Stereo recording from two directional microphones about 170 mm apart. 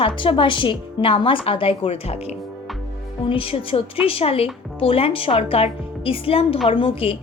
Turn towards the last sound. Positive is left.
turn(degrees=35)  # may be behind; listen again after turning